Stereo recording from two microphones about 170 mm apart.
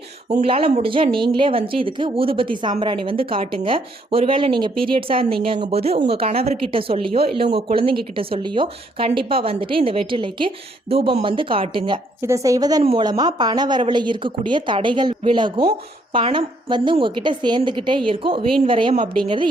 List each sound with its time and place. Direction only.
0.3 s a woman's voice: 35° right (ahead or behind)
12.2 s speech: 20° right (ahead or behind)